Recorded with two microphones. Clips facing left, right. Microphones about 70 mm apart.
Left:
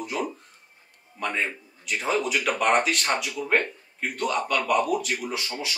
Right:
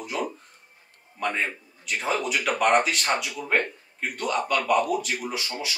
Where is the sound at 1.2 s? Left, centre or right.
Centre.